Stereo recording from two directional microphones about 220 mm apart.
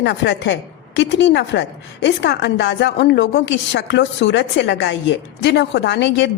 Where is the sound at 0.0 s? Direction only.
50° left (ahead or behind).